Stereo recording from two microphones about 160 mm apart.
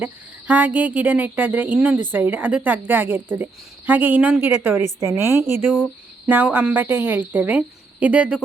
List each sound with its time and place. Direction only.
0.0 s a woman's voice: 10° right (ahead or behind)